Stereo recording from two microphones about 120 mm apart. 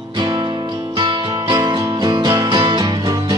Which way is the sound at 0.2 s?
40° right (ahead or behind).